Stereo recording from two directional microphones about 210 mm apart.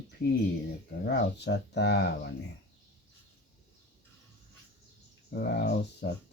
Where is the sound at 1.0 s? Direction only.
55° left (ahead or behind).